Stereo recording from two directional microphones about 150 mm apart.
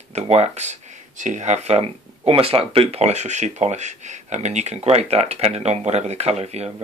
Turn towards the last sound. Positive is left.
turn(degrees=-45)  # may be behind; listen again after turning